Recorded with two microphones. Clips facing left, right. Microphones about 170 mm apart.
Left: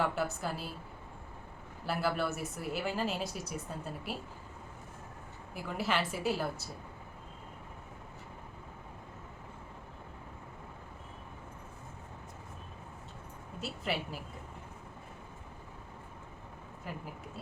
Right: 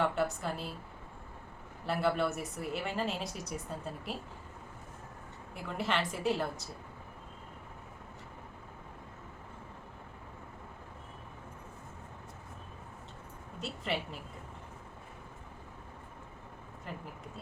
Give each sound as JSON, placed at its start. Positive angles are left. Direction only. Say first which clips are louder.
{"t": 0.0, "sound": "a woman's voice", "louder": "right 1 dB", "side_deg": 0}
{"t": 1.8, "sound": "a woman's voice", "louder": "right 2 dB", "side_deg": 0}
{"t": 5.5, "sound": "a woman's voice", "louder": "even", "side_deg": 5}
{"t": 13.6, "sound": "a woman's voice", "louder": "even", "side_deg": 5}
{"t": 16.9, "sound": "a woman's voice", "louder": "left 1 dB", "side_deg": 5}